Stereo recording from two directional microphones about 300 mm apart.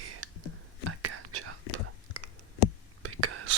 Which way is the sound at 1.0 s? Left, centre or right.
Right.